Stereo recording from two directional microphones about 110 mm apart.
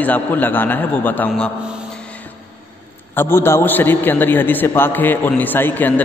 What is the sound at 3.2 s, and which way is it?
A man's voice, 20° left (ahead or behind).